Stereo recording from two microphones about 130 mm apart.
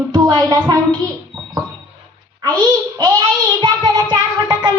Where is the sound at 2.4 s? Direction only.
30° right (ahead or behind).